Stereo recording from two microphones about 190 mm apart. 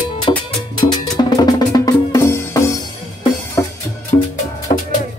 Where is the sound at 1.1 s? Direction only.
20° left (ahead or behind).